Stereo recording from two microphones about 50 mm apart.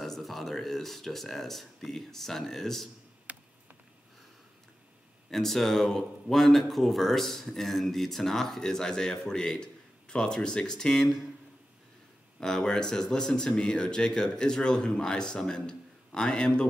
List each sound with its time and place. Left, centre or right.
0.0 s speech: centre
3.3 s a sound: right
5.3 s speech: centre
12.4 s speech: centre